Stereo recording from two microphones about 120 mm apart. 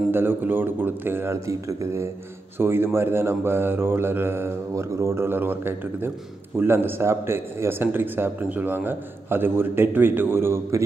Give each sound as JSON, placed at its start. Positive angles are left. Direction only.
{"t": 0.1, "sound": "a man's voice", "side_deg": -15}